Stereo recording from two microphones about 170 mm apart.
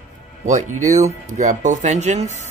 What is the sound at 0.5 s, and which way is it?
Speech, 45° right (ahead or behind).